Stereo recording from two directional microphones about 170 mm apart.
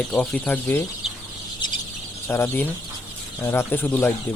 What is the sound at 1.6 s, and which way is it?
Bird, 25° left (ahead or behind).